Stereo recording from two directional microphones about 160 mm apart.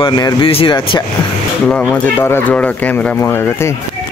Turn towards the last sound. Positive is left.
turn(degrees=10)  # may be behind; listen again after turning